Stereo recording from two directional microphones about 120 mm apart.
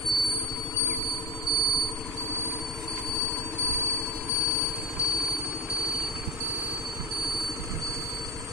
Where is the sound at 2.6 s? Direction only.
Centre (ahead or behind).